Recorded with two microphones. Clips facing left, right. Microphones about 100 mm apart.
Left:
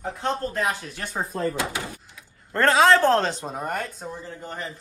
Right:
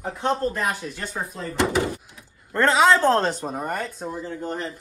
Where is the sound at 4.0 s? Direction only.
5° right (ahead or behind).